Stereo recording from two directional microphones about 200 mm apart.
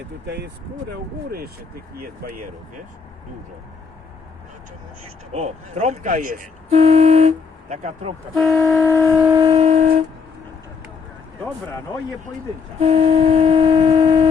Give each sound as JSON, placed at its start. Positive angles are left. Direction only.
{"t": 0.3, "sound": "speech", "side_deg": -55}
{"t": 5.3, "sound": "speech", "side_deg": -30}
{"t": 8.4, "sound": "vehicle", "side_deg": 0}
{"t": 8.7, "sound": "shofar", "side_deg": 10}
{"t": 9.3, "sound": "shofar", "side_deg": -20}
{"t": 9.6, "sound": "vehicle", "side_deg": -35}
{"t": 12.8, "sound": "speech", "side_deg": -30}
{"t": 13.9, "sound": "foghorn", "side_deg": -20}